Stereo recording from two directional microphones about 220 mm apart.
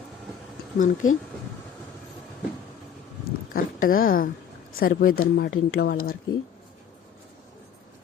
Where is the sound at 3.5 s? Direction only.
40° left (ahead or behind).